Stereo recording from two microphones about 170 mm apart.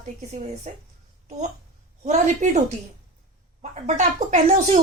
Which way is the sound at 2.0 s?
45° right (ahead or behind).